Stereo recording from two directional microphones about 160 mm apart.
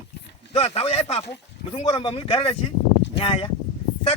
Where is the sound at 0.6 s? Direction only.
40° left (ahead or behind).